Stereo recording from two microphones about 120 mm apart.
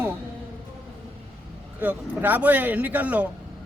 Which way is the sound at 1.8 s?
15° right (ahead or behind).